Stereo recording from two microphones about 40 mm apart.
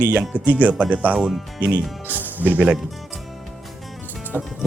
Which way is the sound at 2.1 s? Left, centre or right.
Right.